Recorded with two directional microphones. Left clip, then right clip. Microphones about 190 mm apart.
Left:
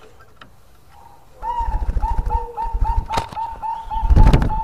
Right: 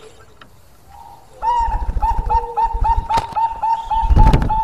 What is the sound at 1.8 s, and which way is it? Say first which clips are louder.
Pigeon: right 7 dB; centre (ahead or behind).